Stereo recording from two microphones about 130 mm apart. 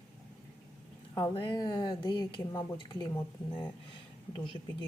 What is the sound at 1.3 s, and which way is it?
A woman's voice, 35° left (ahead or behind).